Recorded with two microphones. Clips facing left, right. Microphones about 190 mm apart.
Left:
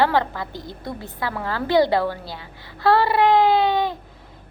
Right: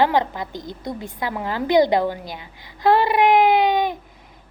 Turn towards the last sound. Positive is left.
turn(degrees=-15)  # may be behind; listen again after turning